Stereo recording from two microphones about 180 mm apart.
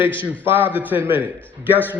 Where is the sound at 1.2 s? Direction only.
10° left (ahead or behind).